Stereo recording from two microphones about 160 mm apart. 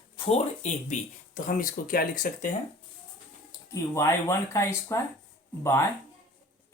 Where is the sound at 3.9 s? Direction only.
20° left (ahead or behind).